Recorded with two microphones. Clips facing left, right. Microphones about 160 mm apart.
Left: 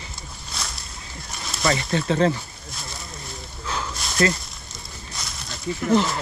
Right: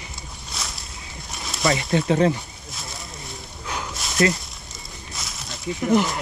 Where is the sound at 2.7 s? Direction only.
Centre (ahead or behind).